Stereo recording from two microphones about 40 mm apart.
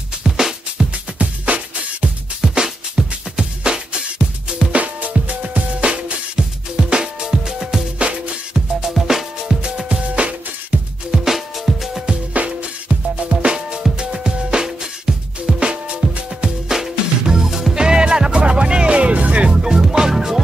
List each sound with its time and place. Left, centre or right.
0.2 s music: centre
1.4 s music: right
2.5 s music: centre
5.3 s music: right; by 7.8 s centre
8.0 s music: right
8.9 s music: centre
9.8 s music: right
11.1 s music: centre
12.4 s music: right; by 15.6 s centre
15.6 s music: right
16.4 s music: centre; by 19.4 s right
19.6 s music: centre